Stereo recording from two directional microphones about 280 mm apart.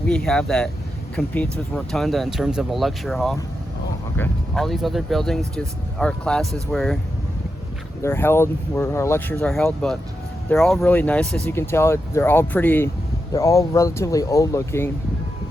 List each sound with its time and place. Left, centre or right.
0.1 s speech: centre
8.0 s speech: centre